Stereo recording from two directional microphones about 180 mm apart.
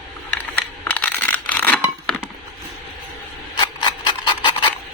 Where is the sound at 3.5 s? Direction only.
25° left (ahead or behind).